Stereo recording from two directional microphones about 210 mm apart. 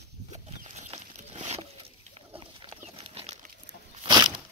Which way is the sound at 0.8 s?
30° right (ahead or behind).